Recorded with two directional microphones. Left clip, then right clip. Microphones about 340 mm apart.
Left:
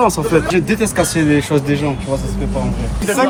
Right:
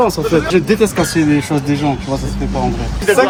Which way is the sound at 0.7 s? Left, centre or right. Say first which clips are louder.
Right 3 dB; centre.